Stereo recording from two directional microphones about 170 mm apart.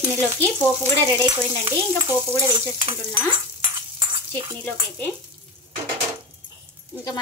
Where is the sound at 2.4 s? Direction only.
30° right (ahead or behind).